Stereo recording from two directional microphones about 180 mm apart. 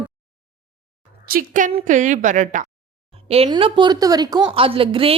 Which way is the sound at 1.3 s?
50° right (ahead or behind).